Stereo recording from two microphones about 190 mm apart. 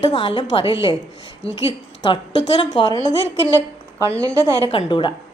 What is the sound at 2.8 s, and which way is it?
Speech, 30° left (ahead or behind).